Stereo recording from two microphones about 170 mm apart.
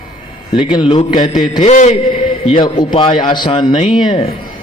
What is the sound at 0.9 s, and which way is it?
Speech, 30° left (ahead or behind).